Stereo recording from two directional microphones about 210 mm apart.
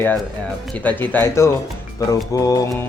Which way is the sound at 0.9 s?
10° left (ahead or behind).